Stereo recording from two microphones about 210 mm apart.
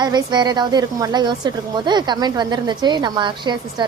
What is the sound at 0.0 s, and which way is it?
Speech, 20° right (ahead or behind).